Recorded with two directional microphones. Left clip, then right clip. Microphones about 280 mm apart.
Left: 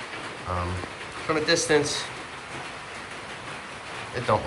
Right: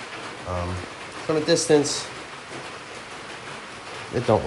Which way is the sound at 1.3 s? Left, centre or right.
Centre.